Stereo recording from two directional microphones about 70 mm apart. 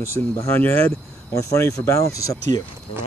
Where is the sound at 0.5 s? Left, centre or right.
Left.